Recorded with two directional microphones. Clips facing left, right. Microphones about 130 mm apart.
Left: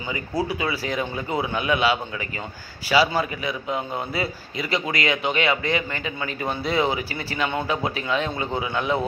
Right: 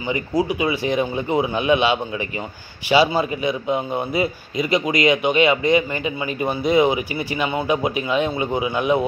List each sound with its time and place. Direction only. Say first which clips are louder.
0.4 s a man's voice: right 4 dB; 15° right (ahead or behind)